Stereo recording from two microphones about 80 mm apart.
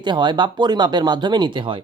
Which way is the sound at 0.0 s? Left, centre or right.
Right.